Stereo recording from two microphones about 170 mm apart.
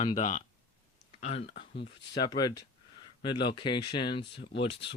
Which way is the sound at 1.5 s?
90° left.